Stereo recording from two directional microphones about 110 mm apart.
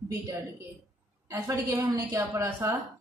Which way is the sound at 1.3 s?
25° right (ahead or behind).